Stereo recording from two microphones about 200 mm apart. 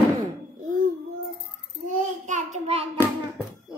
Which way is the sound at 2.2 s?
35° right (ahead or behind).